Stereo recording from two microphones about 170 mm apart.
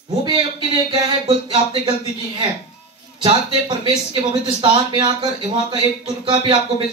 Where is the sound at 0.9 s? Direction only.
25° right (ahead or behind).